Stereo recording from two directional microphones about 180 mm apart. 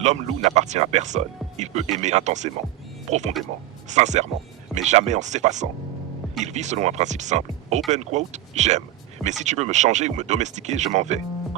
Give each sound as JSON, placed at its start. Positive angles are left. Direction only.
{"t": 0.0, "sound": "speech", "side_deg": -40}